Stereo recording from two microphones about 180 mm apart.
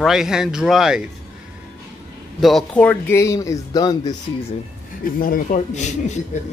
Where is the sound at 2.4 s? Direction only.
5° left (ahead or behind); by 4.1 s 20° left (ahead or behind).